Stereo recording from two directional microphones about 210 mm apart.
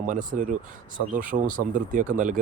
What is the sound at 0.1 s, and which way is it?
Speech, 40° right (ahead or behind).